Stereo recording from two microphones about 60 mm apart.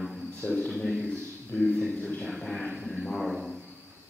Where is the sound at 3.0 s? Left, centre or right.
Centre.